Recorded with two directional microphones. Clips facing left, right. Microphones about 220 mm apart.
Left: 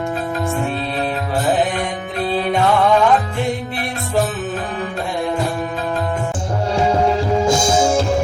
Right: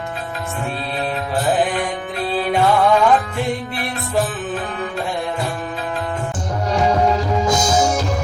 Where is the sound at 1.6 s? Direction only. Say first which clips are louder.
Even; 45° left (ahead or behind).